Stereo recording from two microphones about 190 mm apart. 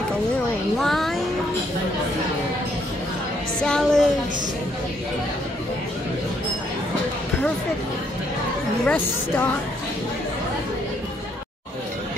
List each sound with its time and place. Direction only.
0.7 s music: centre (ahead or behind)
3.6 s a woman's voice: 5° left (ahead or behind)
8.8 s speech: 10° left (ahead or behind)